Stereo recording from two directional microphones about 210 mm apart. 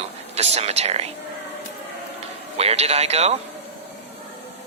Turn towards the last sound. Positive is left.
turn(degrees=-30)  # may be behind; listen again after turning